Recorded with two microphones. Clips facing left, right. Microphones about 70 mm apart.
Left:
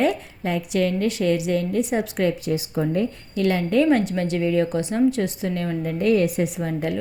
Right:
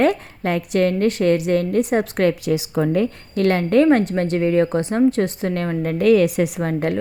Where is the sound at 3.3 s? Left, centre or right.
Right.